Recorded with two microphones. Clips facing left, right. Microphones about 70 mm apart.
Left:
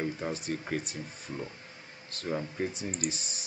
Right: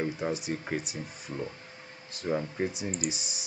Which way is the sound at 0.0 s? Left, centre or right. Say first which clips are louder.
Right 2 dB; centre.